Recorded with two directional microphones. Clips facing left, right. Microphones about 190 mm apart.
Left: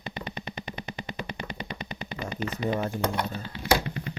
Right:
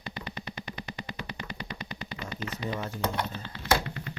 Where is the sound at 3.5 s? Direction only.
15° left (ahead or behind).